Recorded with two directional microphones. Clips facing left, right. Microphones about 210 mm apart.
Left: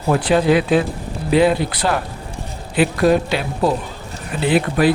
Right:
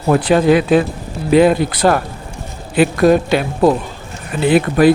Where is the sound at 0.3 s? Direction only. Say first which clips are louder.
Right 3 dB; 50° right (ahead or behind).